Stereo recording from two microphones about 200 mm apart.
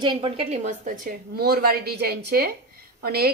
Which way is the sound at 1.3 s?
50° right (ahead or behind).